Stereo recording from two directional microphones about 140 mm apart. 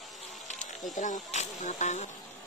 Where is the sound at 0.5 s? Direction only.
60° left (ahead or behind).